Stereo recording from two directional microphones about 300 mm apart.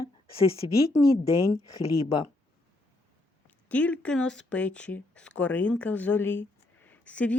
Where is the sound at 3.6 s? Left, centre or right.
Centre.